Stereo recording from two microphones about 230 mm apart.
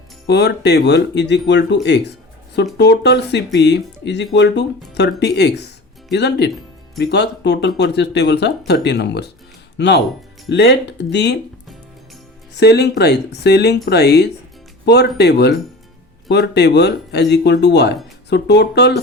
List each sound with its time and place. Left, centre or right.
0.3 s speech: left
12.5 s speech: left